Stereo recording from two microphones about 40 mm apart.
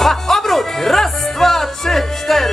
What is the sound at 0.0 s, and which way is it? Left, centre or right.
Music, centre.